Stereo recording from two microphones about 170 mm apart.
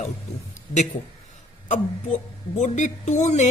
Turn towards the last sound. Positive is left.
turn(degrees=45)  # may be behind; listen again after turning